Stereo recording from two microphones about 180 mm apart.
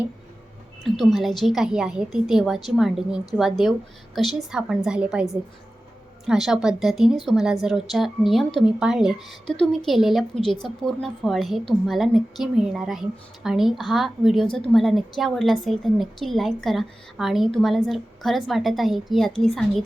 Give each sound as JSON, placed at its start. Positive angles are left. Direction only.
{"t": 0.9, "sound": "a woman's voice", "side_deg": 0}